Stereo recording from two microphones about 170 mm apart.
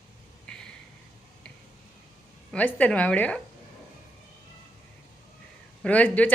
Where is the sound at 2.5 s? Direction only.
10° left (ahead or behind).